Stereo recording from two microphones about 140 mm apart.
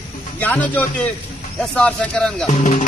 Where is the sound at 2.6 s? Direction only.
60° left (ahead or behind).